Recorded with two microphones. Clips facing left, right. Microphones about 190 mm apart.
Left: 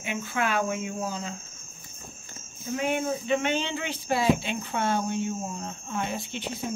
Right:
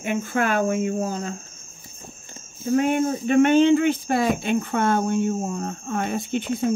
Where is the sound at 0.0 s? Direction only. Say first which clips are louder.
Right 6 dB; 50° right (ahead or behind).